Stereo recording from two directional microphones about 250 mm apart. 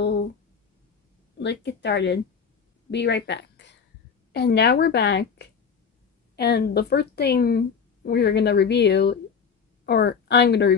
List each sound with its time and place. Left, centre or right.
1.4 s a woman's voice: left